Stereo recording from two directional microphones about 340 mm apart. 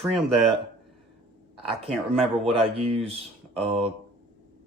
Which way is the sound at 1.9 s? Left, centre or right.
Centre.